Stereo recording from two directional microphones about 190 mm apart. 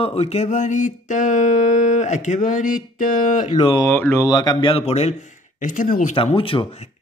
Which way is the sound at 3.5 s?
25° left (ahead or behind).